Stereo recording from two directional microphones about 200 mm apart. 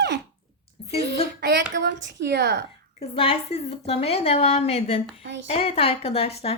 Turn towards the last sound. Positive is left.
turn(degrees=30)  # may be behind; listen again after turning